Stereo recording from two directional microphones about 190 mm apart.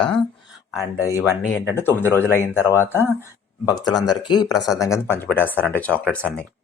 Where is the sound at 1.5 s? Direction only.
10° left (ahead or behind).